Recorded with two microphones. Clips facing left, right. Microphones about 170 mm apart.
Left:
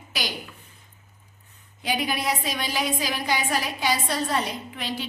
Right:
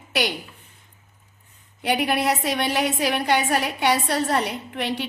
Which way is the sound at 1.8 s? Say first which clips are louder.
Right 5 dB; 65° right (ahead or behind).